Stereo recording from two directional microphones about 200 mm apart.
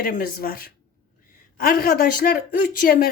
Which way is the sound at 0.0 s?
45° left (ahead or behind).